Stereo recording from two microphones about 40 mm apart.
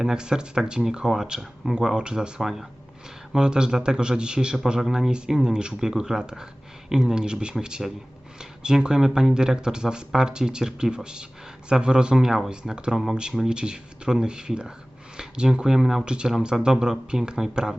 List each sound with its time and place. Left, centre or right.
0.0 s speech: centre
2.0 s a man's voice: right
2.4 s speech: centre
3.3 s a man's voice: centre
16.0 s a man's voice: right